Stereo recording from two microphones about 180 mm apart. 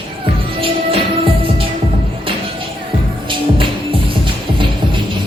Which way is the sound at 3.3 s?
30° right (ahead or behind).